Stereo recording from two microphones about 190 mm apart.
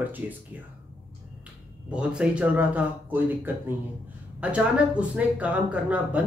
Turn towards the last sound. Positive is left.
turn(degrees=-10)  # may be behind; listen again after turning